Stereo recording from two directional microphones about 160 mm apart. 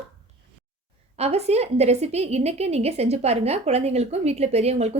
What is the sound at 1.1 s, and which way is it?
A woman's voice, 40° right (ahead or behind).